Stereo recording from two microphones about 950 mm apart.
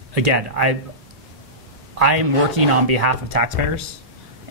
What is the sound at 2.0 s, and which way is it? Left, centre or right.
Speech, right.